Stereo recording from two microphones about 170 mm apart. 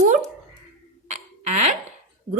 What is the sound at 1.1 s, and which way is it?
Hiccup, 45° right (ahead or behind).